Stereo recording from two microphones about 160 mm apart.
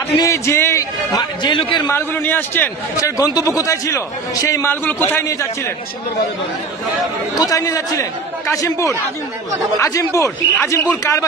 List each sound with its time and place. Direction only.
0.2 s a man's voice: 15° left (ahead or behind)
1.9 s a man's voice: 15° left (ahead or behind)
7.3 s a man's voice: 20° left (ahead or behind)